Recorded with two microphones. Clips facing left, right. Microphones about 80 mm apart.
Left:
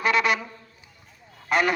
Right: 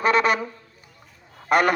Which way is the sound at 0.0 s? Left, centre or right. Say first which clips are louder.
Right 3 dB; right.